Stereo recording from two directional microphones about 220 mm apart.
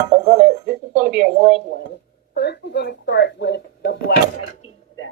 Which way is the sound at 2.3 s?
50° left (ahead or behind).